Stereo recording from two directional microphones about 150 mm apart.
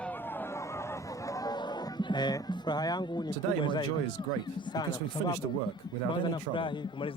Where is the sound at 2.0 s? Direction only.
30° left (ahead or behind).